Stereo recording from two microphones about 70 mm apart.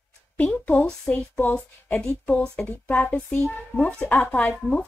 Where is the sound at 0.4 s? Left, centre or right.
Left.